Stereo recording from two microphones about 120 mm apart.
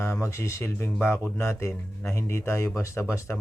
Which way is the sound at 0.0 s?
20° left (ahead or behind).